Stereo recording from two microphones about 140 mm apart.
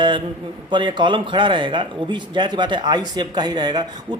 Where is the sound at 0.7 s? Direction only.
35° right (ahead or behind).